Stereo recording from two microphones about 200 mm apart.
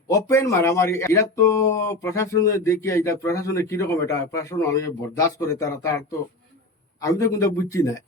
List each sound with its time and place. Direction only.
0.1 s speech: 15° left (ahead or behind)